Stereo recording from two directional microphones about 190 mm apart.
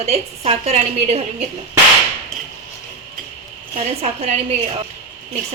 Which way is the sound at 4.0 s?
35° right (ahead or behind).